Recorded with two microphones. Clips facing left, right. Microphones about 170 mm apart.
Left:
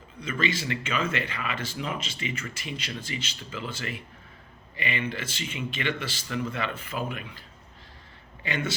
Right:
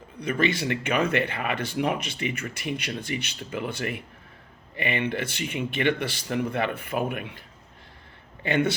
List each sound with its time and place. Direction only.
0.2 s speech: 60° right (ahead or behind)
8.4 s speech: 60° right (ahead or behind)